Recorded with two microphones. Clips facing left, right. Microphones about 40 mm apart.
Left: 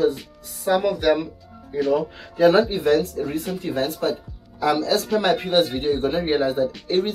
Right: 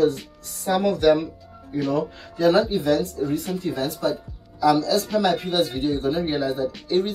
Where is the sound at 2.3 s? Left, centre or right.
Left.